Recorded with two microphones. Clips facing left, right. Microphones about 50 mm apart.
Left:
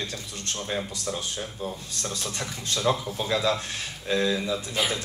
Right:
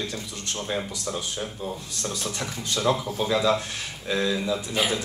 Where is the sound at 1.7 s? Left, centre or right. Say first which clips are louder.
Right 2 dB; right.